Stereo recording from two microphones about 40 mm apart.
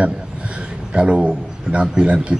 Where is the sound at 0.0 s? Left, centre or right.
Right.